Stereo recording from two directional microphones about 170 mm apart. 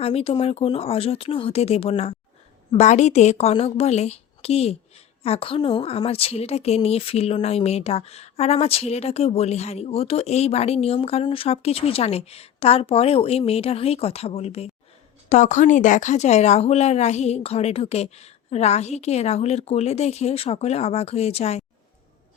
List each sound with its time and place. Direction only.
0.0 s a woman's voice: 35° left (ahead or behind)